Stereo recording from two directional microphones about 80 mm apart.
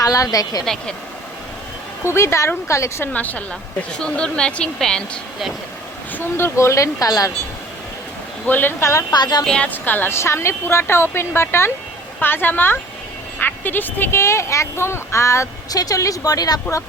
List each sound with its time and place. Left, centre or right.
0.0 s speech: left
0.6 s speech: centre
2.0 s a woman's voice: left
3.1 s a woman's voice: centre
6.1 s a woman's voice: left
8.4 s a woman's voice: left
8.8 s a woman's voice: left
9.1 s speech: left
9.4 s speech: centre
9.6 s a woman's voice: left
15.7 s speech: left